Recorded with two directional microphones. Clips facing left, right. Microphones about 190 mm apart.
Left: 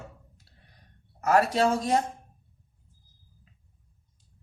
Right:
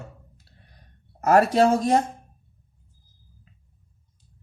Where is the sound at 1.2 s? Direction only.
45° right (ahead or behind).